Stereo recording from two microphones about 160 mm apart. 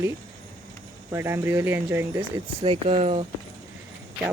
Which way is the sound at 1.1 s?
15° right (ahead or behind).